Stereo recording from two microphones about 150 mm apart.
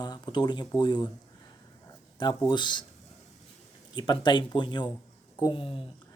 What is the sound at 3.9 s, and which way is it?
Speech, 30° left (ahead or behind).